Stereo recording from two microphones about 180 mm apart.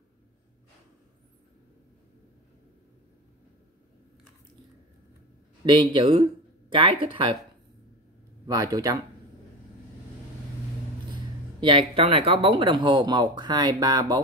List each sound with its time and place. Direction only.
5.7 s speech: 25° right (ahead or behind)
8.5 s speech: 20° right (ahead or behind)
11.6 s speech: 30° right (ahead or behind)